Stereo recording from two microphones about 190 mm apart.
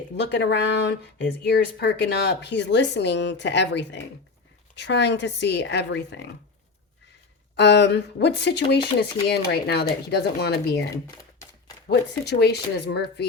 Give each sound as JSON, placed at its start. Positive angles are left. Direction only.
{"t": 0.2, "sound": "speech", "side_deg": 65}
{"t": 7.5, "sound": "speech", "side_deg": 65}
{"t": 10.9, "sound": "a sound", "side_deg": 20}
{"t": 11.9, "sound": "speech", "side_deg": 60}